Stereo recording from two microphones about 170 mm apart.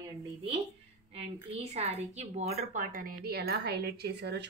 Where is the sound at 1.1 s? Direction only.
40° right (ahead or behind).